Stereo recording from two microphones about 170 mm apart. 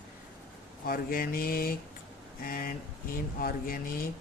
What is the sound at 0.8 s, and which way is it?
Speech, 60° left (ahead or behind).